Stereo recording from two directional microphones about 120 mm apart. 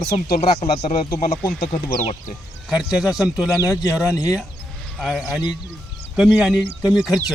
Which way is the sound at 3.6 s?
25° left (ahead or behind).